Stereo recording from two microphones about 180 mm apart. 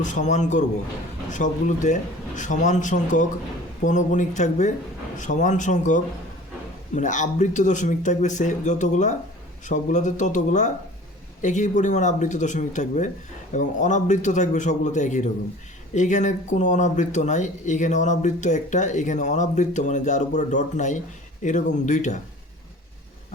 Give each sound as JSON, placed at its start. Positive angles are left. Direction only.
{"t": 0.0, "sound": "speech", "side_deg": 45}